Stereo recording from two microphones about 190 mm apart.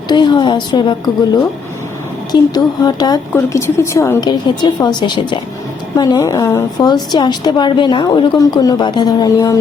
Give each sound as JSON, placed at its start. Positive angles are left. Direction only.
{"t": 0.1, "sound": "a woman's voice", "side_deg": 25}